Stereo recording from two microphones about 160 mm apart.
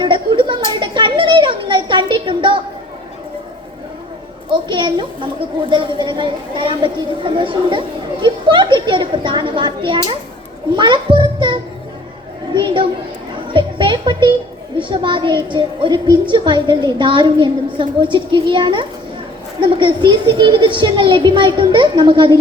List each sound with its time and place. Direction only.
0.0 s a sound: 30° right (ahead or behind)
4.7 s children playing: 30° right (ahead or behind)
10.8 s music: 30° right (ahead or behind)
12.5 s children playing: 30° right (ahead or behind)
13.5 s music: 30° right (ahead or behind)
14.8 s a sound: 30° right (ahead or behind)
19.6 s a child's voice: 30° right (ahead or behind)